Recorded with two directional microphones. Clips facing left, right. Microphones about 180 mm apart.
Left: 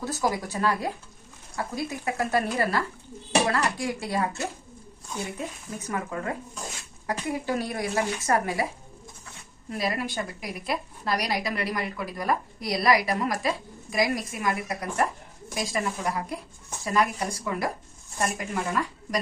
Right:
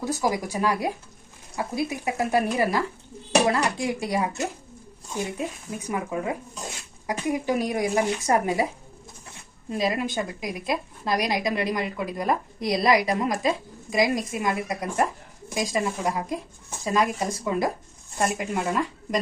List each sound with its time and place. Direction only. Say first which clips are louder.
0.0 s a woman's voice: right 2 dB; 15° right (ahead or behind)